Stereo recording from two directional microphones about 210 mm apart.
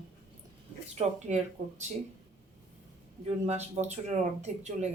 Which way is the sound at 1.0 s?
35° right (ahead or behind).